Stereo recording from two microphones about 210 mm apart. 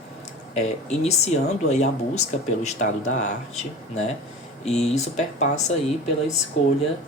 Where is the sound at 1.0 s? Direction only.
30° left (ahead or behind).